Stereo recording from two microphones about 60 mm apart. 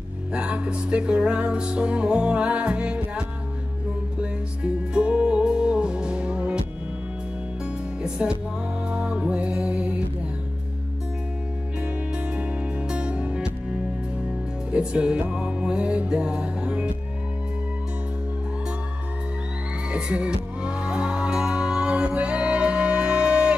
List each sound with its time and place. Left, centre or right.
0.3 s music: centre
4.9 s music: centre
8.0 s music: centre
12.4 s music: centre
14.7 s music: centre
19.9 s music: centre